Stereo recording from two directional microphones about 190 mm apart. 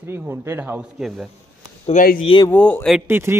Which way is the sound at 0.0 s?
15° right (ahead or behind).